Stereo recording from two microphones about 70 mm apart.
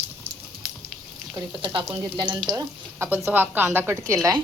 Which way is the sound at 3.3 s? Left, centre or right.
Right.